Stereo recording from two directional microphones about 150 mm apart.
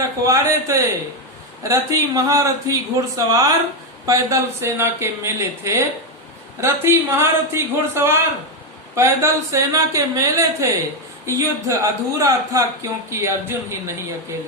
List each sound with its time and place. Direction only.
0.2 s a man's voice: 20° right (ahead or behind)